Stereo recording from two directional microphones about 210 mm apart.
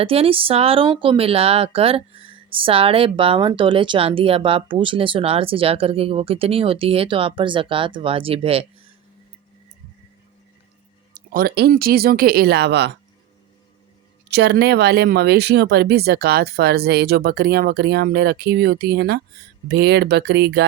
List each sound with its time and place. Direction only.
0.0 s speech: 25° right (ahead or behind)
11.1 s speech: 40° right (ahead or behind)
14.3 s speech: 55° right (ahead or behind)